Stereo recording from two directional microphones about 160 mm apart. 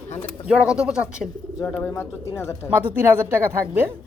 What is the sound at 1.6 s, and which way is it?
Speech, 10° left (ahead or behind).